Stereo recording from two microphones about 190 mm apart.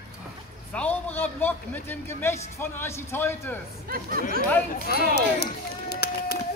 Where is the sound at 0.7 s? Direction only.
10° left (ahead or behind).